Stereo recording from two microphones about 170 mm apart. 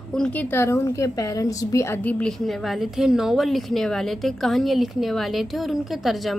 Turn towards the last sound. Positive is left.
turn(degrees=0)  # may be behind; listen again after turning